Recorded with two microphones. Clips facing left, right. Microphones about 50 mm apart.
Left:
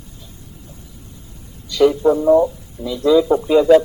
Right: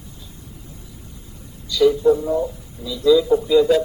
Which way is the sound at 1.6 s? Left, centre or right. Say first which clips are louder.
Left 2 dB; left.